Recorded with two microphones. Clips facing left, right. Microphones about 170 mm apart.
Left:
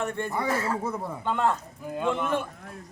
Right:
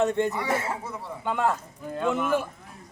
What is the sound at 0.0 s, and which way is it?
Speech, 20° right (ahead or behind).